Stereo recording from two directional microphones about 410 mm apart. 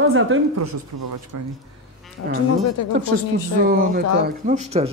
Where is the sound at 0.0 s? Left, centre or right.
Right.